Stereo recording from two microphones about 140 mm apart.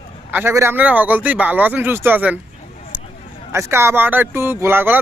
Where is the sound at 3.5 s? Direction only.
20° right (ahead or behind).